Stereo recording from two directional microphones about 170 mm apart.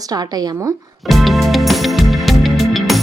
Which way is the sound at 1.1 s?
Centre (ahead or behind).